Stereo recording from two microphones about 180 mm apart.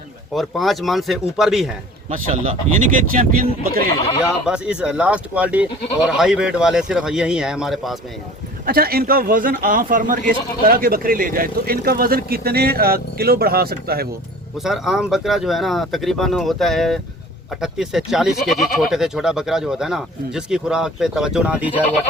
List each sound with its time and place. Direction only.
0.3 s speech: centre (ahead or behind)
2.0 s speech: 50° right (ahead or behind)
4.4 s speech: 5° right (ahead or behind)
8.6 s a man's voice: 55° right (ahead or behind)
14.6 s speech: centre (ahead or behind)